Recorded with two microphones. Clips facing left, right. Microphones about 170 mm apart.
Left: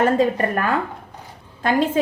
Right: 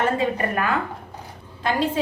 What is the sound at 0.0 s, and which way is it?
A woman's voice, 45° left (ahead or behind).